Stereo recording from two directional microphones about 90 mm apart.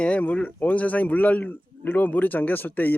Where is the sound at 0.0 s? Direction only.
15° left (ahead or behind).